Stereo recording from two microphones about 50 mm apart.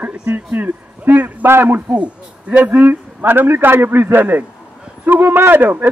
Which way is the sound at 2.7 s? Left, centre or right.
Right.